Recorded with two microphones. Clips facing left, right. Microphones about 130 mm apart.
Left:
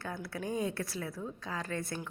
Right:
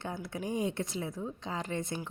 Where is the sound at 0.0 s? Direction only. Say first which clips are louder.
Right 1 dB; 20° right (ahead or behind).